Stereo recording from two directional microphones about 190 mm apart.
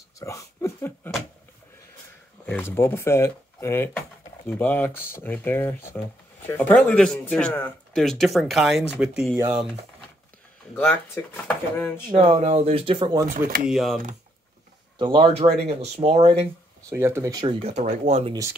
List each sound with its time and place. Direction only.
0.2 s dog: 15° left (ahead or behind)
2.4 s speech: 10° left (ahead or behind); by 9.7 s 5° right (ahead or behind)
10.7 s speech: 10° left (ahead or behind)
12.1 s speech: 30° right (ahead or behind)
13.7 s speech: centre (ahead or behind)
15.0 s speech: 25° right (ahead or behind)
16.9 s speech: 15° right (ahead or behind); by 18.3 s 35° right (ahead or behind)